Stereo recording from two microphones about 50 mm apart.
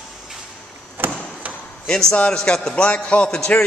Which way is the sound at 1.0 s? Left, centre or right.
Right.